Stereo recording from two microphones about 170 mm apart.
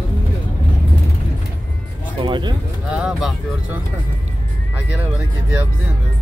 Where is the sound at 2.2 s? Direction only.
30° right (ahead or behind).